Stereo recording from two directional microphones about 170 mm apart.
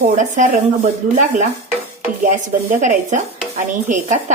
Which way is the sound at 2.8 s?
45° right (ahead or behind).